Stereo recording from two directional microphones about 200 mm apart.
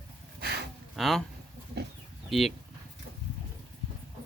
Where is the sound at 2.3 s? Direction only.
Centre (ahead or behind).